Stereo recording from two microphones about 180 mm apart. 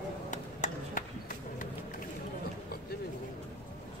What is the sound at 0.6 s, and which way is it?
Run, 45° left (ahead or behind).